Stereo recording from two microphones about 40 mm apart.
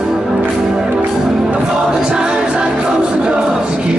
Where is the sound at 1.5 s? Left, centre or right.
Right.